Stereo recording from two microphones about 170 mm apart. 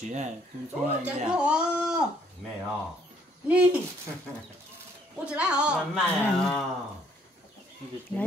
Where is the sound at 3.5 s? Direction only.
5° right (ahead or behind).